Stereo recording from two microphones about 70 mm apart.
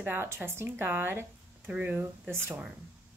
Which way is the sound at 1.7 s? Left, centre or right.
Right.